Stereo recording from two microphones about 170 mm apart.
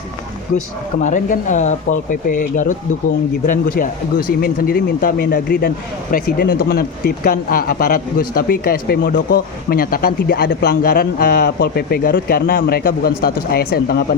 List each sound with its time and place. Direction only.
1.0 s speech: 50° left (ahead or behind)